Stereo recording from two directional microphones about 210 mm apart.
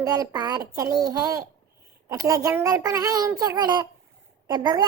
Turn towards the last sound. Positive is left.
turn(degrees=-20)  # may be behind; listen again after turning